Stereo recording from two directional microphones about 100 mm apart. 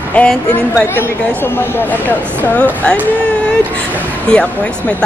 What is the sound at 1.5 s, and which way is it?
A woman's voice, 20° left (ahead or behind).